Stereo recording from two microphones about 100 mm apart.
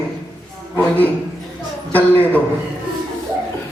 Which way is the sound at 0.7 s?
20° left (ahead or behind).